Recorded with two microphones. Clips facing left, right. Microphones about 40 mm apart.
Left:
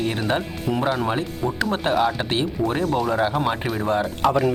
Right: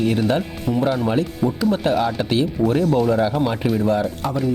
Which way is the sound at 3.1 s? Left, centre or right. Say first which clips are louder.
Right 2 dB; left.